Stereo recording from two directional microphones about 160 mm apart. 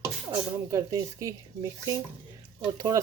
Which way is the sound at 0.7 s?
20° right (ahead or behind).